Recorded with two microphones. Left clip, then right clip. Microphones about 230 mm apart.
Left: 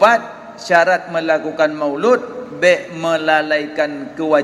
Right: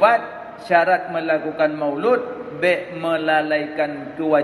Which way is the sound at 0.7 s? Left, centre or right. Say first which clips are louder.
Left 3 dB; left.